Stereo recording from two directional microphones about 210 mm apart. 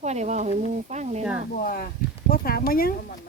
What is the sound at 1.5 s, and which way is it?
Speech, 40° left (ahead or behind).